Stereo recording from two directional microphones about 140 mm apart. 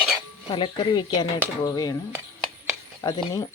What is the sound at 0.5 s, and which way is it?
A woman's voice, 35° left (ahead or behind).